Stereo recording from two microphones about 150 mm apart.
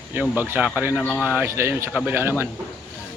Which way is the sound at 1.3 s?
15° right (ahead or behind).